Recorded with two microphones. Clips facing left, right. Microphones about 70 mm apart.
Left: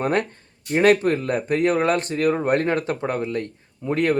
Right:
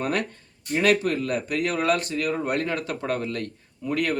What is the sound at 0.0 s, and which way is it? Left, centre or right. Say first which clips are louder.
Speech: left 4 dB; left.